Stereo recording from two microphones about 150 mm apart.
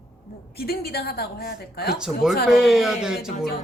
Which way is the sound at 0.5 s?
90° left.